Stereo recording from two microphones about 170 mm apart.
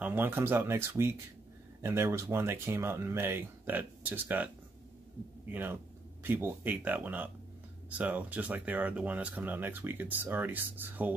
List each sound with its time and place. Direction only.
0.0 s speech: 10° right (ahead or behind)
5.5 s speech: 10° right (ahead or behind)